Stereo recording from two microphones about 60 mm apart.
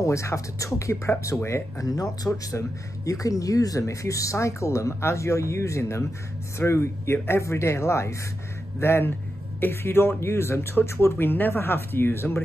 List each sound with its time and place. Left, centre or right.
0.0 s speech: left
1.8 s speech: left